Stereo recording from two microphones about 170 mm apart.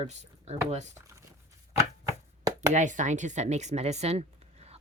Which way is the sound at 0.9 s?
15° right (ahead or behind).